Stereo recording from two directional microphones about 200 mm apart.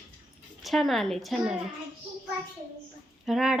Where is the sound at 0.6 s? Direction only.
Centre (ahead or behind).